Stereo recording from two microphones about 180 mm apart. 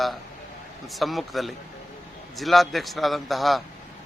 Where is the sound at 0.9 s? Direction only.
Centre (ahead or behind).